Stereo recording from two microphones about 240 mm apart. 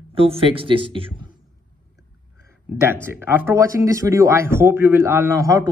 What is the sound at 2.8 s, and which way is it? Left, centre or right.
Speech, centre.